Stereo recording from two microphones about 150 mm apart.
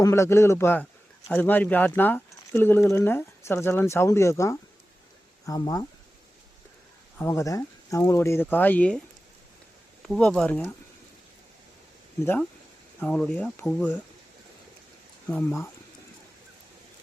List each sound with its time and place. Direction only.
0.0 s speech: 20° left (ahead or behind)
7.2 s speech: 15° left (ahead or behind)
10.0 s speech: 5° left (ahead or behind)
12.2 s speech: 15° left (ahead or behind)
15.3 s speech: 15° left (ahead or behind)